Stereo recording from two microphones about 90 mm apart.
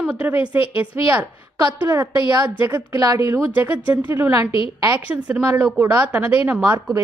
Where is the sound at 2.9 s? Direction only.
40° right (ahead or behind).